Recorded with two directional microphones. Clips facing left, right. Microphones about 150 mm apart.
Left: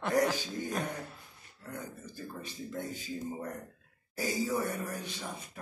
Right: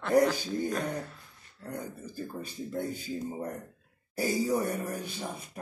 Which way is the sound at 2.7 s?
10° right (ahead or behind).